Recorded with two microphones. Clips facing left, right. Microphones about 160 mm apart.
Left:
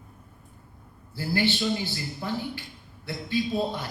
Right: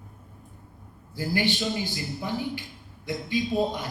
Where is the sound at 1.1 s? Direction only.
15° right (ahead or behind).